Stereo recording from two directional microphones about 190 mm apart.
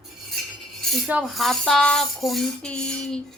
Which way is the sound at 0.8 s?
Centre (ahead or behind).